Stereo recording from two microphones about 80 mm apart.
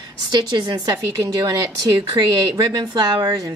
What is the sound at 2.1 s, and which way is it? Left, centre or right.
Speech, right.